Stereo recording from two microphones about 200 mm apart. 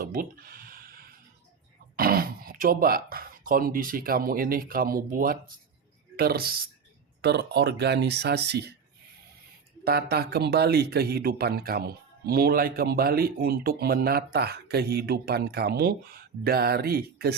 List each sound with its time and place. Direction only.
0.0 s a sound: 45° right (ahead or behind)
2.0 s a man's voice: 45° right (ahead or behind)
9.8 s a man's voice: 50° right (ahead or behind)